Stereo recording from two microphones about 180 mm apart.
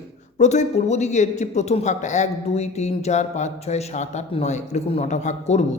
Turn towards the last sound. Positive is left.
turn(degrees=40)  # may be behind; listen again after turning